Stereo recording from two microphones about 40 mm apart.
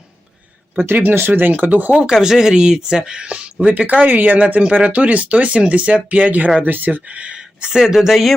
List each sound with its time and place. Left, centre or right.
0.8 s speech: right
2.0 s speech: centre; by 3.7 s right
3.7 s speech: right
6.6 s speech: right
7.0 s speech: right
7.7 s speech: centre